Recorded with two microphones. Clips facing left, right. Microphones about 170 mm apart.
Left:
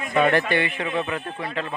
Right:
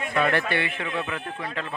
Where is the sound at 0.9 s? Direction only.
25° left (ahead or behind).